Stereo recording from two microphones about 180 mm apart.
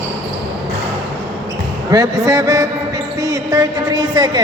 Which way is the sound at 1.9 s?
20° right (ahead or behind).